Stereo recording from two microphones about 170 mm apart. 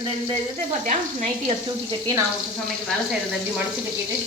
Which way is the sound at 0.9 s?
40° right (ahead or behind).